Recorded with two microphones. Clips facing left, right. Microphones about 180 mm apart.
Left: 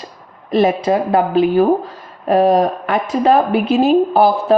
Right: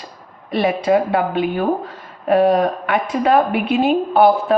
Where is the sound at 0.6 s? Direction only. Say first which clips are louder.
Left 2 dB; 45° left (ahead or behind).